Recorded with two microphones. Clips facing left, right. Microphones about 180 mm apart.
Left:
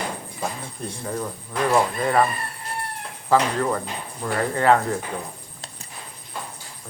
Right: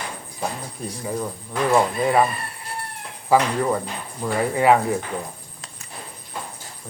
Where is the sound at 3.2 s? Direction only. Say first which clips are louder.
Right 1 dB; 10° right (ahead or behind).